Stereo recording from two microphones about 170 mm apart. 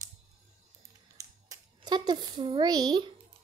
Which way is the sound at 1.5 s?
25° right (ahead or behind).